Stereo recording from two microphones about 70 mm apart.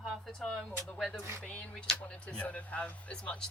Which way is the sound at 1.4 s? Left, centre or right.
Centre.